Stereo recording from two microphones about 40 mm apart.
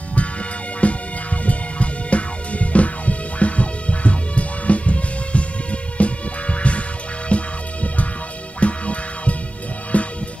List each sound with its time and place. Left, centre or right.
0.7 s music: left